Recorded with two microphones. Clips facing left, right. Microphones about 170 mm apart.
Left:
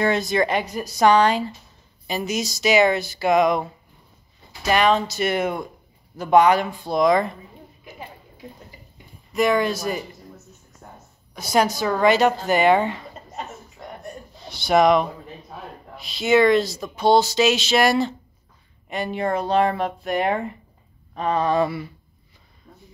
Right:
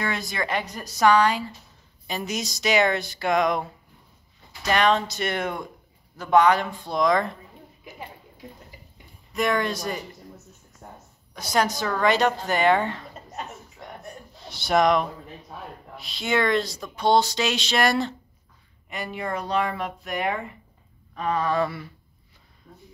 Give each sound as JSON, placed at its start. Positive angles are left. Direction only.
{"t": 0.0, "sound": "speech", "side_deg": 25}
{"t": 2.0, "sound": "speech", "side_deg": 5}
{"t": 4.6, "sound": "speech", "side_deg": 5}
{"t": 9.3, "sound": "speech", "side_deg": 5}
{"t": 11.3, "sound": "speech", "side_deg": 10}
{"t": 14.4, "sound": "speech", "side_deg": 0}
{"t": 18.9, "sound": "speech", "side_deg": 25}